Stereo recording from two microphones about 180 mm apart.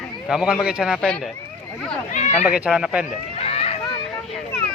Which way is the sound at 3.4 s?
35° left (ahead or behind).